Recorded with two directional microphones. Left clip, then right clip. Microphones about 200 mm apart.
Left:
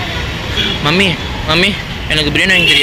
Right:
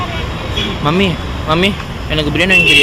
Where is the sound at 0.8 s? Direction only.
10° right (ahead or behind).